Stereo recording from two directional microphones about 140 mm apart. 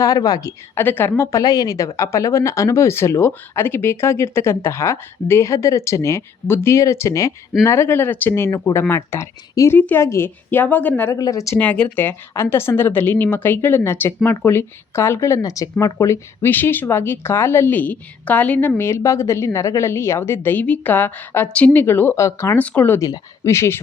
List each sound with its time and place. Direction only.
0.0 s a woman's voice: 25° left (ahead or behind)
0.8 s a woman's voice: 15° left (ahead or behind)